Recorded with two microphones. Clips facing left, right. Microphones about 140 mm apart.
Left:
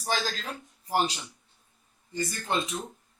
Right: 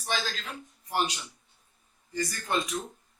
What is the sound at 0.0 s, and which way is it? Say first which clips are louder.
Speech: left 2 dB; 35° left (ahead or behind).